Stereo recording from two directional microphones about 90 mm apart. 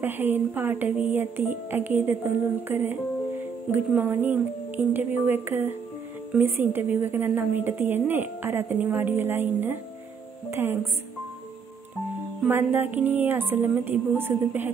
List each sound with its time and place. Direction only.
0.0 s speech: 20° right (ahead or behind)
12.4 s speech: 20° right (ahead or behind)